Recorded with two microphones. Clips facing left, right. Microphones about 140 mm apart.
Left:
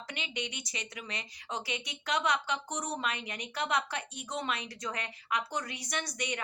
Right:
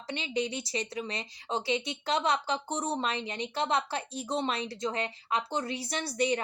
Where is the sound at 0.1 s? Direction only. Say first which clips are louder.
Right 8 dB; 30° right (ahead or behind).